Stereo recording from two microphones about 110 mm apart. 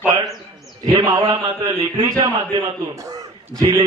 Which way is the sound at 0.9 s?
40° right (ahead or behind).